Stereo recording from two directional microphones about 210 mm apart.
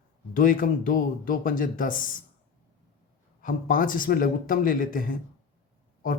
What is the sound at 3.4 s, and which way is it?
Speech, 40° left (ahead or behind).